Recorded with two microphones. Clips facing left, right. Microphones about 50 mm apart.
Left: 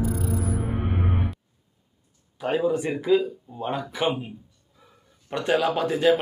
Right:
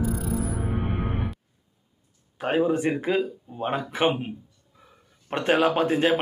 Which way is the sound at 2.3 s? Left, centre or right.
Right.